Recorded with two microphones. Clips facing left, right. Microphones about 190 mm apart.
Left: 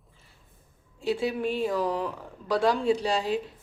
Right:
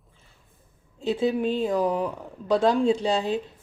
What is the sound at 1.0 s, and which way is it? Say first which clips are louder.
A woman's voice: right 3 dB; 20° right (ahead or behind).